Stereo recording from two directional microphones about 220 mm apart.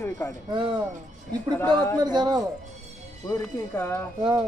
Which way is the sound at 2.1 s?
20° right (ahead or behind).